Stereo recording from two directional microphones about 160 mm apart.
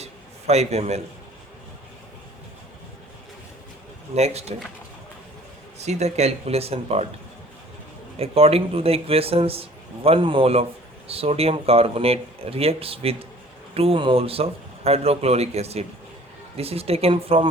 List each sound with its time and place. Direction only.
0.0 s a sound: 40° right (ahead or behind)
4.1 s speech: 40° right (ahead or behind)
5.8 s speech: 45° right (ahead or behind)
8.2 s speech: 35° right (ahead or behind)